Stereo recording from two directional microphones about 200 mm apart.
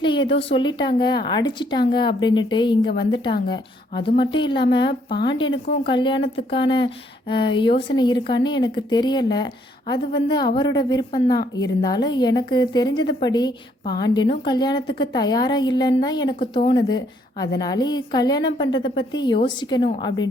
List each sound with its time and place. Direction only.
0.0 s speech: 25° left (ahead or behind)